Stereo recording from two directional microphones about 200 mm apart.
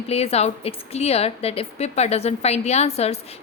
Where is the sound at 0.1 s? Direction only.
30° left (ahead or behind).